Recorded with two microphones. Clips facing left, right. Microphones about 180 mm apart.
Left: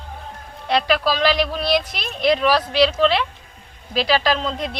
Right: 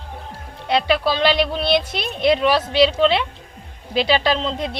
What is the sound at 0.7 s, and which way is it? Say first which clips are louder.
A woman's voice: right 1 dB; 25° right (ahead or behind).